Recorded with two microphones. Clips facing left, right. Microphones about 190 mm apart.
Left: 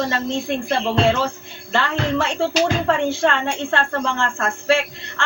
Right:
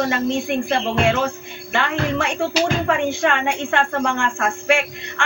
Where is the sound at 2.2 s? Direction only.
15° right (ahead or behind).